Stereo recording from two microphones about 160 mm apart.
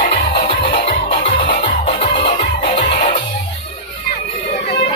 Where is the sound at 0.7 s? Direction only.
35° left (ahead or behind).